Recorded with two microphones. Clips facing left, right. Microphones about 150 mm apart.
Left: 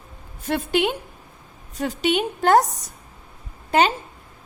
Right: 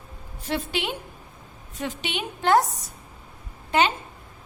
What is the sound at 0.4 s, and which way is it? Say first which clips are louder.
A woman's voice: left 6 dB; 50° left (ahead or behind).